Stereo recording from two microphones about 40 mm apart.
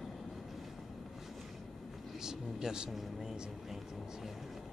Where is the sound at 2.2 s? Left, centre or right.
Centre.